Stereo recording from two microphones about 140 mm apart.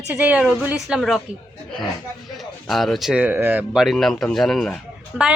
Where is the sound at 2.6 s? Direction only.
Centre (ahead or behind).